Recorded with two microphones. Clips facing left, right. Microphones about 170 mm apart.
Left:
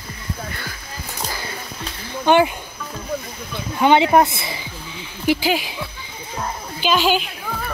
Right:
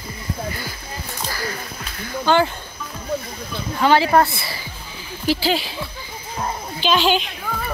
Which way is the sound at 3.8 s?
20° left (ahead or behind).